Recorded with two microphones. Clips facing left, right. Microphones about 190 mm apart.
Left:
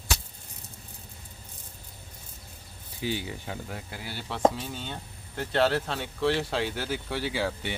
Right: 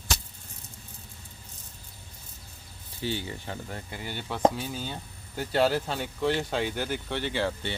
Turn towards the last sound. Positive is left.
turn(degrees=10)  # may be behind; listen again after turning